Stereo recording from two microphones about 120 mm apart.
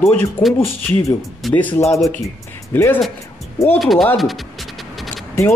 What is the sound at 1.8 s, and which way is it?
Speech, centre (ahead or behind).